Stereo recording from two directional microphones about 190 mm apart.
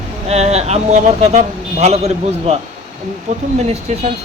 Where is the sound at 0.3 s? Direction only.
35° right (ahead or behind).